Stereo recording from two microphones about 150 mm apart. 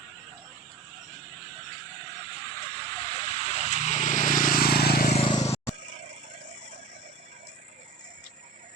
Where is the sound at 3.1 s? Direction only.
45° left (ahead or behind); by 5.1 s 90° left.